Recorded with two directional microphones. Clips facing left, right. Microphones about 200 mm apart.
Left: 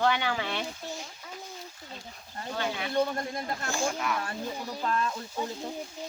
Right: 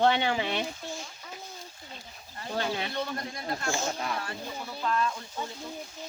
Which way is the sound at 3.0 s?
50° left (ahead or behind).